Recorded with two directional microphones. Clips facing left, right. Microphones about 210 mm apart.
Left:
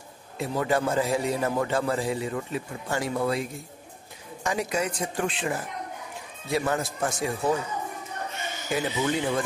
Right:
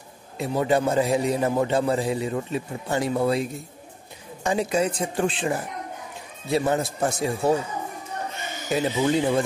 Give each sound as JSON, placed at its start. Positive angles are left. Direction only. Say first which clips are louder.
{"t": 0.4, "sound": "a man's voice", "louder": "right 3 dB", "side_deg": -20}
{"t": 8.7, "sound": "a man's voice", "louder": "right 5 dB", "side_deg": -25}